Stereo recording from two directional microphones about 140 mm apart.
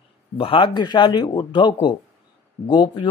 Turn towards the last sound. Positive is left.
turn(degrees=35)  # may be behind; listen again after turning